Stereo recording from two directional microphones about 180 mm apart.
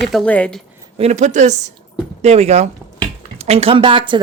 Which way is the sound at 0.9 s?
40° right (ahead or behind).